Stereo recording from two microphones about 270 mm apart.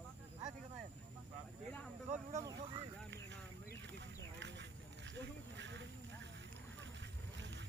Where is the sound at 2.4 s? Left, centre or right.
Centre.